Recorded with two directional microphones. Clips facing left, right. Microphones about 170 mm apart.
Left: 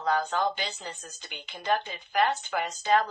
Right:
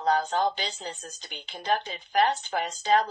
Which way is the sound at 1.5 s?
30° right (ahead or behind).